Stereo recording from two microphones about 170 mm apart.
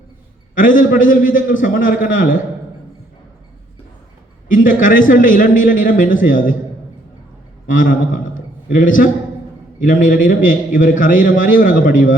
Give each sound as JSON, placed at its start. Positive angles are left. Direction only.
{"t": 0.5, "sound": "a man's voice", "side_deg": 55}
{"t": 4.4, "sound": "a man's voice", "side_deg": 50}
{"t": 7.7, "sound": "a man's voice", "side_deg": 50}